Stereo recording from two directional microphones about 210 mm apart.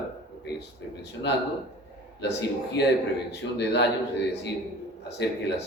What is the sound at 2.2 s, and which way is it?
A man's voice, 55° left (ahead or behind).